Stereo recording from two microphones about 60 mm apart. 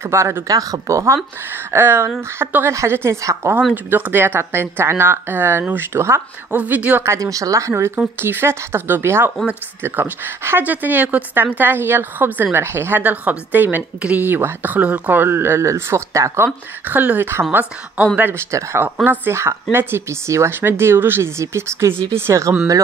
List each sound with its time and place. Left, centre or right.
0.0 s speech: right
0.5 s speech: right
1.7 s speech: right
3.2 s speech: right
3.7 s speech: right
6.5 s a woman's voice: right
7.2 s speech: right
15.2 s speech: right
16.8 s speech: right
18.5 s speech: right
20.2 s speech: right
20.6 s speech: right